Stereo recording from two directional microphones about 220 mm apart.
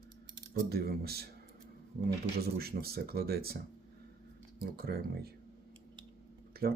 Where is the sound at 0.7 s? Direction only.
45° right (ahead or behind).